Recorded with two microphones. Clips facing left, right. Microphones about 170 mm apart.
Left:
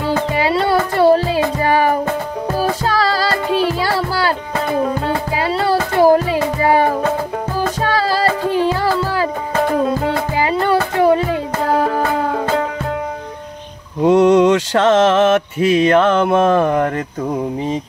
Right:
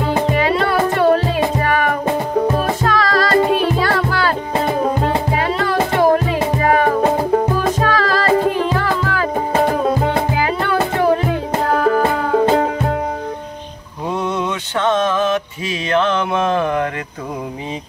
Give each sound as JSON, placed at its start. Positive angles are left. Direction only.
{"t": 0.4, "sound": "music", "side_deg": 35}
{"t": 5.6, "sound": "music", "side_deg": 35}
{"t": 14.0, "sound": "mantra", "side_deg": 90}